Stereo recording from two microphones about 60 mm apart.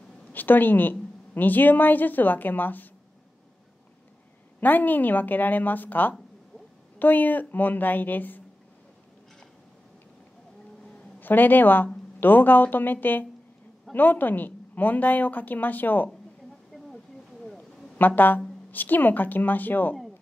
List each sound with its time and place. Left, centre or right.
0.3 s a woman's voice: left
4.6 s a woman's voice: left
11.1 s a woman's voice: left
16.7 s a sound: centre
17.9 s a woman's voice: left